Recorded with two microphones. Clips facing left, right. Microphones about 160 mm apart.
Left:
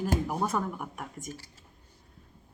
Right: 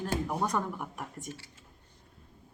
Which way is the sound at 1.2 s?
40° left (ahead or behind).